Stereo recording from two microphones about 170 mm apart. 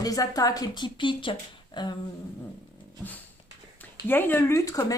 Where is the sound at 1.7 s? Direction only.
25° left (ahead or behind).